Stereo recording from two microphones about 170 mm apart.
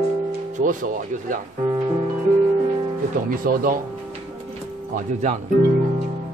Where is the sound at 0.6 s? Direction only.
50° right (ahead or behind).